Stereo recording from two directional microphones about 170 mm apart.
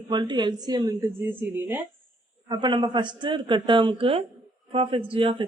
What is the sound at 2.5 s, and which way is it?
A woman's voice, 25° right (ahead or behind).